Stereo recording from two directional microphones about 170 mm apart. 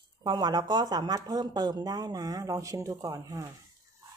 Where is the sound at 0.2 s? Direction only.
25° right (ahead or behind).